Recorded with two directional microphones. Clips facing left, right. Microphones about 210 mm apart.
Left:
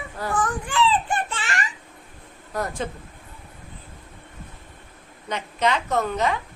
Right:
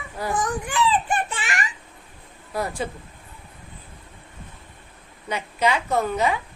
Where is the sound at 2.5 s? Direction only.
10° right (ahead or behind).